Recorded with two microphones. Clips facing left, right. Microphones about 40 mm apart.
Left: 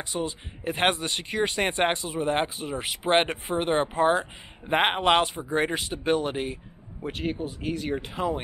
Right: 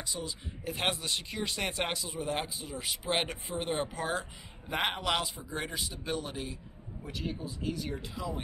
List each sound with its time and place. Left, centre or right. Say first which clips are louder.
0.0 s speech: left 8 dB; left